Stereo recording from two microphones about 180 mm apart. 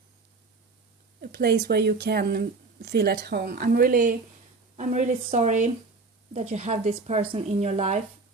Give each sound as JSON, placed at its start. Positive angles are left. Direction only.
{"t": 1.2, "sound": "speech", "side_deg": -60}